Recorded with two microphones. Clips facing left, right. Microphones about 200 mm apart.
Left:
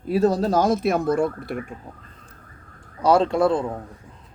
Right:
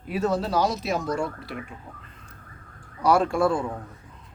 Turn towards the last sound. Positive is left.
turn(degrees=20)  # may be behind; listen again after turning